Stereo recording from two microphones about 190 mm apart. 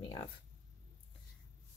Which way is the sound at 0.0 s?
25° left (ahead or behind).